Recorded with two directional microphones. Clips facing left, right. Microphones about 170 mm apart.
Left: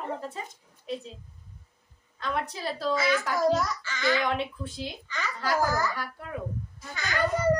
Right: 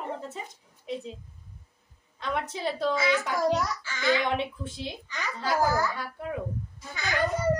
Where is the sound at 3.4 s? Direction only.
15° right (ahead or behind).